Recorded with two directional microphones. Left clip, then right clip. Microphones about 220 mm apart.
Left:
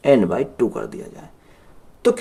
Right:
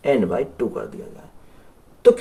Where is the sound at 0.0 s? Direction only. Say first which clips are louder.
Left 4 dB; 50° left (ahead or behind).